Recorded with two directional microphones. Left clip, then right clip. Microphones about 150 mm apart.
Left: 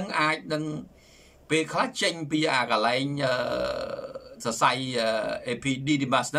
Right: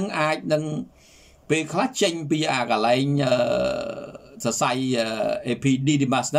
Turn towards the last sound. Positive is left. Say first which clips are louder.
# right 3 dB
turn(degrees=-25)  # may be behind; listen again after turning